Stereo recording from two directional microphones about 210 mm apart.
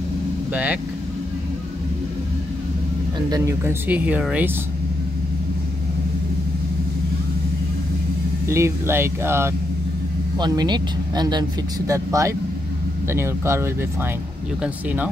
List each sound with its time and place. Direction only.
0.5 s speech: 5° right (ahead or behind)
3.3 s speech: 15° right (ahead or behind)
8.5 s speech: 15° right (ahead or behind)